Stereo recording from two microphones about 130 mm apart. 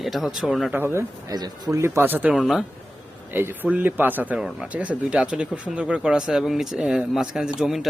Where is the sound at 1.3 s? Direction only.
30° right (ahead or behind).